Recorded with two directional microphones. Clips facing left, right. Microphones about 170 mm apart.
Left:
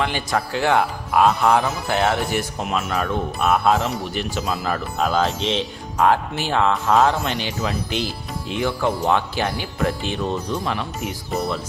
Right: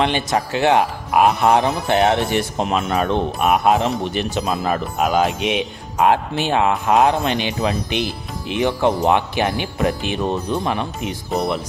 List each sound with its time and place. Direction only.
0.0 s speech: 20° right (ahead or behind)